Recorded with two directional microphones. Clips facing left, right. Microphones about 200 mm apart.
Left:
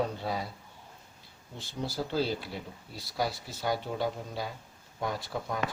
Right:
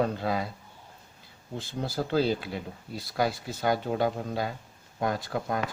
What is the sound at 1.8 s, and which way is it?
Speech, 55° right (ahead or behind).